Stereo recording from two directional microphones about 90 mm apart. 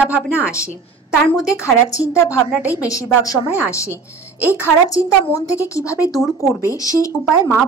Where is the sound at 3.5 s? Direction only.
30° left (ahead or behind).